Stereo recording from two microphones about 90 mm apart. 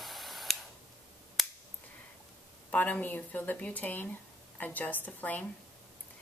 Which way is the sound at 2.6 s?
15° left (ahead or behind).